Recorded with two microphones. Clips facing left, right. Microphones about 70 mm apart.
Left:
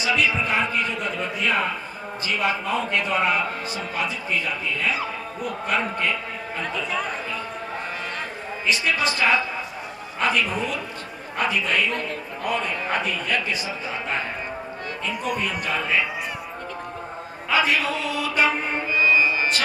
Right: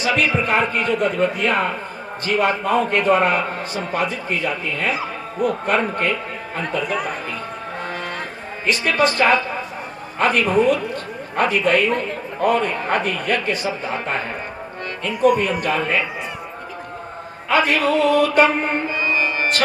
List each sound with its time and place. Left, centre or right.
0.0 s a man's voice: right
8.6 s a man's voice: right
17.5 s mantra: right